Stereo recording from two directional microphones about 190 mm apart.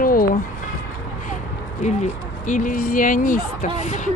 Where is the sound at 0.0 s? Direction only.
50° left (ahead or behind).